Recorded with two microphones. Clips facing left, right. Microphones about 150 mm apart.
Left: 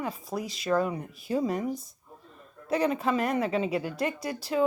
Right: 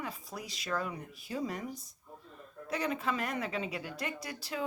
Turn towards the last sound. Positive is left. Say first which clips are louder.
# left 11 dB
turn(degrees=40)  # may be behind; listen again after turning